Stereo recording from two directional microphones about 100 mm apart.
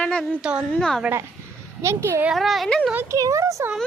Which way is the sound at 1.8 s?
30° right (ahead or behind).